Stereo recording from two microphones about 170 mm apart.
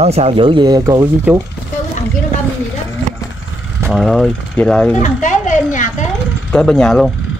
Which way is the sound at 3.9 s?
Centre (ahead or behind).